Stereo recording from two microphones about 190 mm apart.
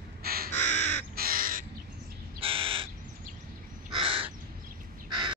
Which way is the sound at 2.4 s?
30° right (ahead or behind).